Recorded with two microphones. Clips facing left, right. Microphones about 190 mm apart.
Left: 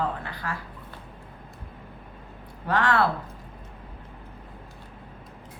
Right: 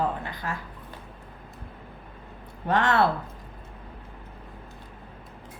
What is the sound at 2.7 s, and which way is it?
Speech, 20° right (ahead or behind).